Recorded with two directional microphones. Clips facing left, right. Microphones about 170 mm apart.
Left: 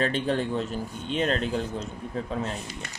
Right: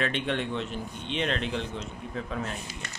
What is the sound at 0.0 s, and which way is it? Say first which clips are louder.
Speech: left 3 dB; 35° left (ahead or behind).